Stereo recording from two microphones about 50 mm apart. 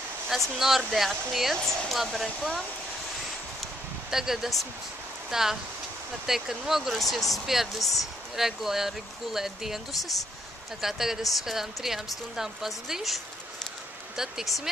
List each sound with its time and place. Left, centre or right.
0.3 s speech: centre
2.2 s speech: centre
4.1 s speech: centre
10.8 s speech: centre